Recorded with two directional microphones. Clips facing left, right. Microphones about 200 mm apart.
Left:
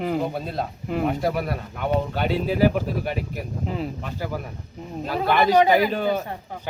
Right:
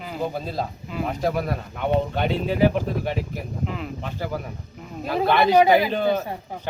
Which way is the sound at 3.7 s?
35° left (ahead or behind).